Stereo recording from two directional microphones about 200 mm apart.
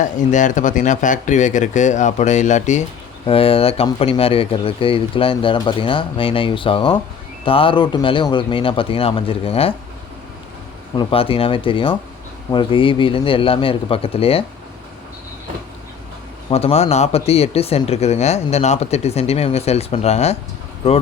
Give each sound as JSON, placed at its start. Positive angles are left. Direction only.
{"t": 0.0, "sound": "speech", "side_deg": 40}
{"t": 10.9, "sound": "speech", "side_deg": 30}
{"t": 16.5, "sound": "speech", "side_deg": 30}